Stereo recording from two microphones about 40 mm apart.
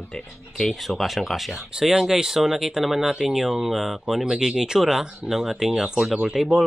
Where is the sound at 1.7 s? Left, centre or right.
Centre.